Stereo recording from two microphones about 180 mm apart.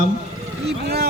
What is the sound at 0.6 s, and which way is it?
Vehicle, 65° right (ahead or behind).